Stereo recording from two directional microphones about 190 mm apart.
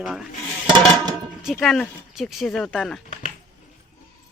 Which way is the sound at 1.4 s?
Centre (ahead or behind).